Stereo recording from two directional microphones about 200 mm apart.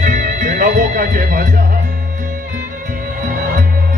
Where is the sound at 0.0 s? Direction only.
40° right (ahead or behind).